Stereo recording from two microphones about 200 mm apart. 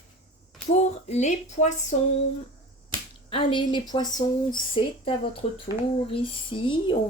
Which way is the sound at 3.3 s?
25° left (ahead or behind).